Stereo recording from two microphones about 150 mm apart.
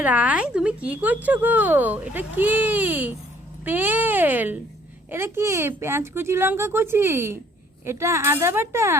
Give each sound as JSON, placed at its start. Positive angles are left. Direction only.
{"t": 0.0, "sound": "speech", "side_deg": -10}